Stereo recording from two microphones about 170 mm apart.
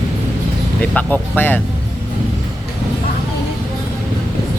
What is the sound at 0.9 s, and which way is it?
Speech, 10° left (ahead or behind).